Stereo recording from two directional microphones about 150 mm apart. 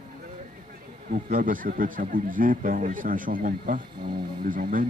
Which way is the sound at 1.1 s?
65° right (ahead or behind).